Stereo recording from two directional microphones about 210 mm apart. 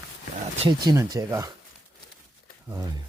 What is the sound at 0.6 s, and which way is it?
Speech, 15° right (ahead or behind).